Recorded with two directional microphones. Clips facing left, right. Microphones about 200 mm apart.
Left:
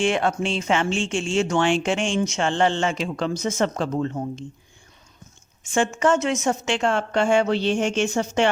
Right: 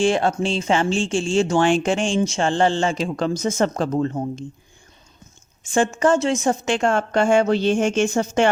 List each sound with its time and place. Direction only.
0.0 s speech: 35° right (ahead or behind)
5.6 s speech: 35° right (ahead or behind)
6.7 s speech: 45° right (ahead or behind)